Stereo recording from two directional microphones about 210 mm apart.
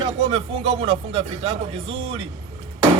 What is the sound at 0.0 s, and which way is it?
Speech, 30° right (ahead or behind).